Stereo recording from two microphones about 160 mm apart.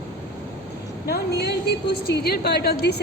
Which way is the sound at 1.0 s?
85° left.